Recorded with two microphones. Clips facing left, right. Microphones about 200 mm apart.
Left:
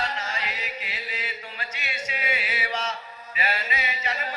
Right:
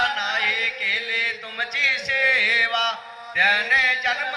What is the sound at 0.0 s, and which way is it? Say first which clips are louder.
Music: right 2 dB; 90° right.